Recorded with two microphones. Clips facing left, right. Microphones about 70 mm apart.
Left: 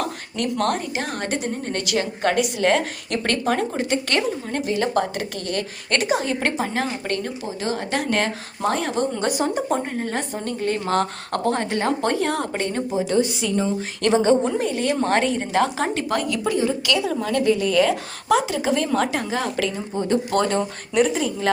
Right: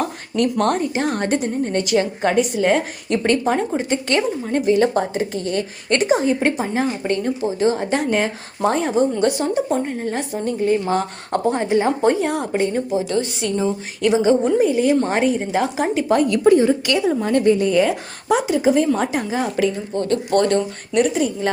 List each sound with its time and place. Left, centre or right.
0.6 s a woman's voice: right
2.6 s a woman's voice: centre; by 6.2 s right
6.2 s a woman's voice: centre
9.1 s a woman's voice: centre
13.1 s a woman's voice: centre
16.3 s a woman's voice: right
17.8 s a woman's voice: centre
20.3 s a woman's voice: centre